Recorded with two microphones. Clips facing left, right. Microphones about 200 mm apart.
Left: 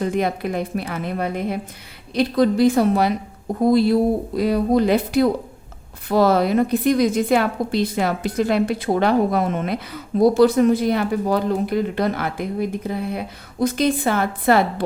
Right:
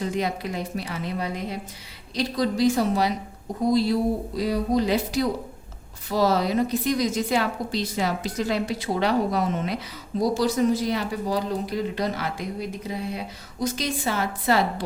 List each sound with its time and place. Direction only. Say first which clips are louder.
0.0 s a woman's voice: left 5 dB; 55° left (ahead or behind)